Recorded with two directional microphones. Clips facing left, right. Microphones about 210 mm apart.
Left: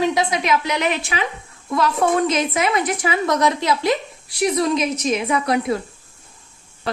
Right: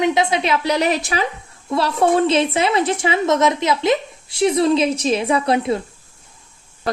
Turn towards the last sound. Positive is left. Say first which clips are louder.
# right 2 dB
turn(degrees=-25)  # may be behind; listen again after turning